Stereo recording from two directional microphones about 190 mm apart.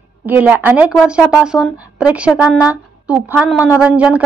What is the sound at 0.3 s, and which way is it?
Speech, 10° right (ahead or behind).